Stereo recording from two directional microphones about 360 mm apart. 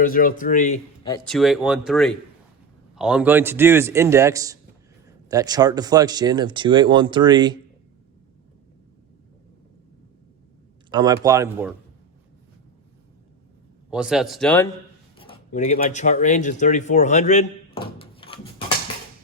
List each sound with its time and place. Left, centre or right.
0.0 s a man's voice: left; by 7.6 s centre
10.9 s speech: centre
13.9 s a man's voice: centre
15.2 s speech: centre